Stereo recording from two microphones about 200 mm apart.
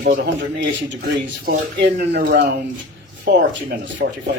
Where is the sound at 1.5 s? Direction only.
55° right (ahead or behind).